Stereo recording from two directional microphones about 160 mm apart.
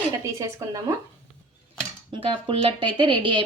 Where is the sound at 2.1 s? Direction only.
35° right (ahead or behind).